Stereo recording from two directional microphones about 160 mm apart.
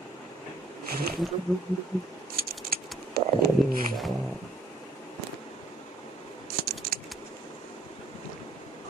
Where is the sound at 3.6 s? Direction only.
Centre (ahead or behind).